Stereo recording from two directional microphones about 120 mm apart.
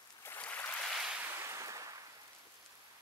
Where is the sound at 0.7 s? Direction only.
Centre (ahead or behind).